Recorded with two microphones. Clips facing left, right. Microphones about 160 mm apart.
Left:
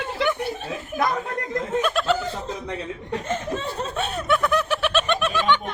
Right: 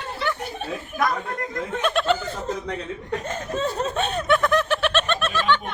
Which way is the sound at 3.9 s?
5° left (ahead or behind).